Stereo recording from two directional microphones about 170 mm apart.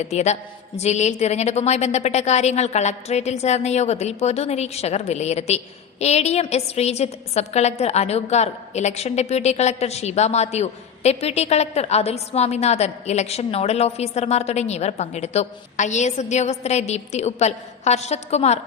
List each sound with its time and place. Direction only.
0.0 s a woman's voice: 40° left (ahead or behind)